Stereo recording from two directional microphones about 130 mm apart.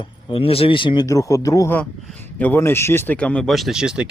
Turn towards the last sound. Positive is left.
turn(degrees=-5)  # may be behind; listen again after turning